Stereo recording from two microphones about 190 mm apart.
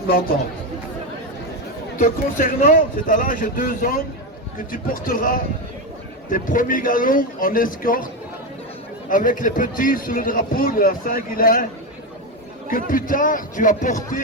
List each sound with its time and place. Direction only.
0.1 s a man's voice: 50° left (ahead or behind)
2.0 s a man's voice: 45° left (ahead or behind)
12.7 s a man's voice: 45° left (ahead or behind)